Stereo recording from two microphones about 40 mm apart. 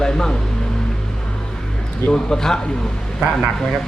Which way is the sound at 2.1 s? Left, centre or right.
Centre.